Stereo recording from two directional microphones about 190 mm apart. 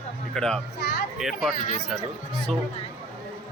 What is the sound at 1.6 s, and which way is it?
Speech, 40° left (ahead or behind).